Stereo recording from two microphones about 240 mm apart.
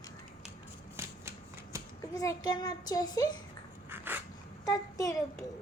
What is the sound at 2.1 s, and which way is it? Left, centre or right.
A child's voice, centre.